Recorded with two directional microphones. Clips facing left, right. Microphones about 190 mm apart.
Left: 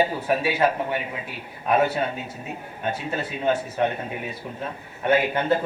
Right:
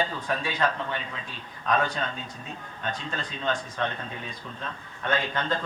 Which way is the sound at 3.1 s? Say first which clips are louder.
Left 7 dB; 10° left (ahead or behind).